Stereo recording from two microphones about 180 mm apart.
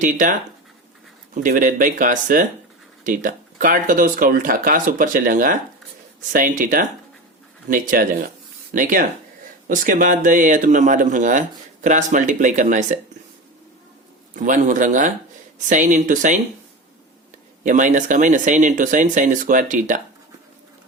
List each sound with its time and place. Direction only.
0.0 s speech: 45° right (ahead or behind)
14.3 s speech: 45° right (ahead or behind)
17.6 s speech: 45° right (ahead or behind)